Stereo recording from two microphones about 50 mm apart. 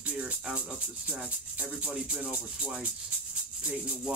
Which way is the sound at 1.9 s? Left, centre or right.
Centre.